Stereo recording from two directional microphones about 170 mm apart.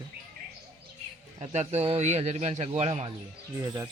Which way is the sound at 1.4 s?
40° right (ahead or behind).